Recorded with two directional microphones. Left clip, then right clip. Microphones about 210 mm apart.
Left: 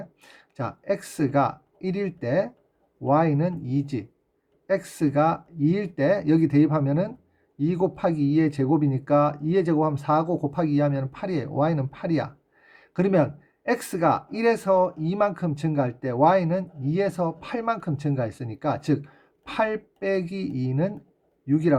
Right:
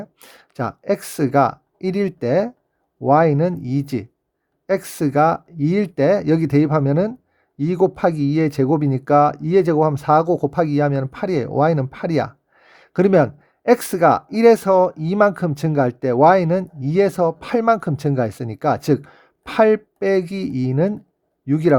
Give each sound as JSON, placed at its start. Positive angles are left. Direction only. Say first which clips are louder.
{"t": 0.0, "sound": "speech", "louder": "right 5 dB", "side_deg": -45}